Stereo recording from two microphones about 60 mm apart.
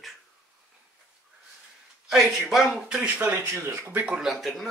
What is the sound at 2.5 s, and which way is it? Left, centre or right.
Speech, centre.